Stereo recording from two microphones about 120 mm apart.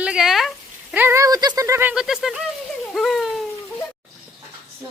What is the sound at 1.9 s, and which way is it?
Speech, 5° right (ahead or behind).